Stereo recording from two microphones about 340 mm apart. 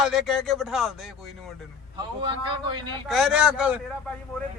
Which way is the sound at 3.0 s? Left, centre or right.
Centre.